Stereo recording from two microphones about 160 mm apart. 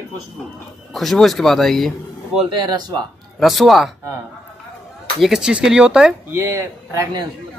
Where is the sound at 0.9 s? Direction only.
Centre (ahead or behind).